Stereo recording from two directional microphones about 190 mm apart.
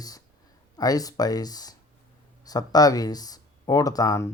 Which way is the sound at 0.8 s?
20° left (ahead or behind).